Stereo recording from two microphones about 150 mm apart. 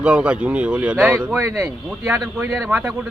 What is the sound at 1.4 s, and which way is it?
Speech, 20° right (ahead or behind).